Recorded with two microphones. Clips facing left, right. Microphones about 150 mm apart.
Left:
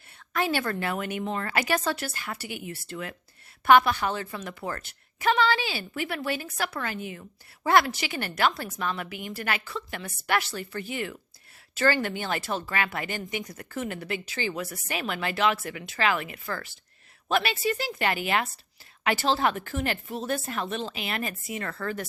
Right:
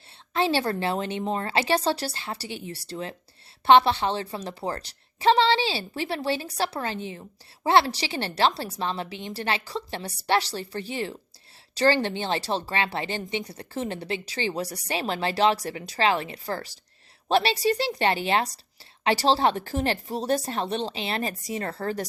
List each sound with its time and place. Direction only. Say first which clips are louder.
0.3 s a woman's voice: right 3 dB; 30° right (ahead or behind)